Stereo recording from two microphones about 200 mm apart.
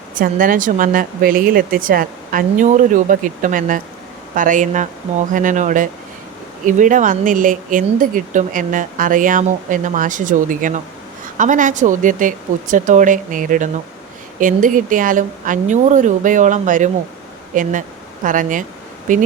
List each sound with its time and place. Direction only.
0.1 s speech: 45° right (ahead or behind)